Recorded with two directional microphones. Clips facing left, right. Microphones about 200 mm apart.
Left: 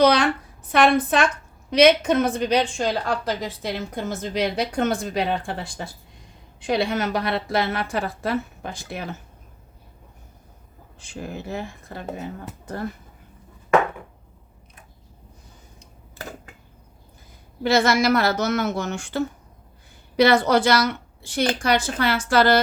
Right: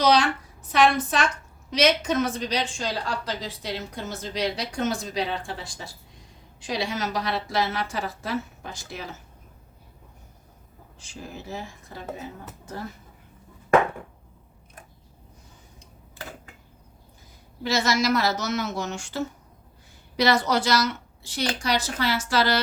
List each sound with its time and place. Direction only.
0.0 s a sound: 60° left (ahead or behind)
0.7 s a woman's voice: 55° left (ahead or behind)
11.0 s a woman's voice: 60° left (ahead or behind)
17.6 s a woman's voice: 55° left (ahead or behind)